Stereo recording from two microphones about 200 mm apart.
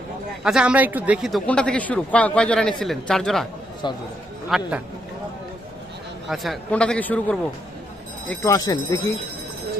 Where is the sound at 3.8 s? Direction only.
20° left (ahead or behind).